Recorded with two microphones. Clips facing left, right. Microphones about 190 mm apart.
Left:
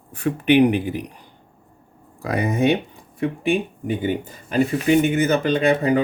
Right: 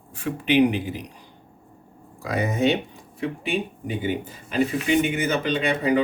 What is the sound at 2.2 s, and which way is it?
Speech, 55° left (ahead or behind).